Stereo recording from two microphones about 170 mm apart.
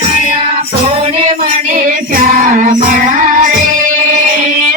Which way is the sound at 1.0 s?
40° right (ahead or behind).